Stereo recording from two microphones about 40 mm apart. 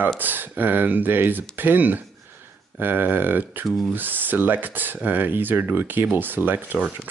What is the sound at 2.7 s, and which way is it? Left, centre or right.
Speech, right.